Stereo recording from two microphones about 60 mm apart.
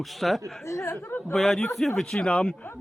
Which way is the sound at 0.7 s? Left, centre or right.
Left.